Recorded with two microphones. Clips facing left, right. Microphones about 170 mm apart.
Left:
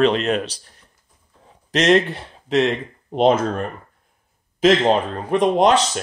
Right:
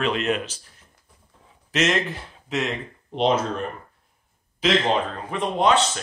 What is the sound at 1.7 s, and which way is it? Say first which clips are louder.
Speech: left 7 dB; 30° left (ahead or behind).